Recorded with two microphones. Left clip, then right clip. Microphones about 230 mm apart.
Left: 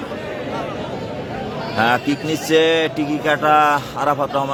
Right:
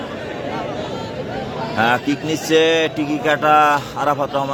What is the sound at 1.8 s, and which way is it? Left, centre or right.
Speech, centre.